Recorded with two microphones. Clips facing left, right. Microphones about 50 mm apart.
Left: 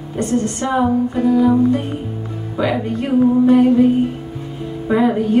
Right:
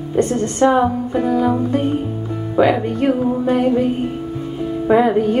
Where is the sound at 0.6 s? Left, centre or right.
Centre.